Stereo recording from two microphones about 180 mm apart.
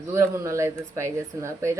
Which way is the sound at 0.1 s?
15° right (ahead or behind).